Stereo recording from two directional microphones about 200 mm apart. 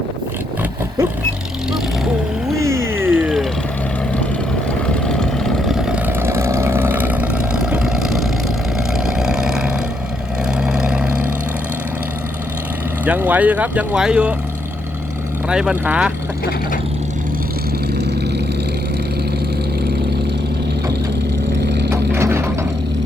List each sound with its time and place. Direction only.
2.5 s music: 15° right (ahead or behind)
2.9 s a sound: 10° right (ahead or behind)
5.0 s vehicle: 5° left (ahead or behind)
13.1 s speech: 5° right (ahead or behind)
15.4 s speech: 5° right (ahead or behind)
17.9 s vehicle: 55° right (ahead or behind)
21.8 s a sound: 10° right (ahead or behind)